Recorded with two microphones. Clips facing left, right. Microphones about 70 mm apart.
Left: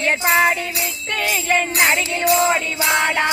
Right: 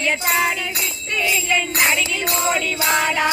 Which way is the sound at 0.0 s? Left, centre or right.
Left.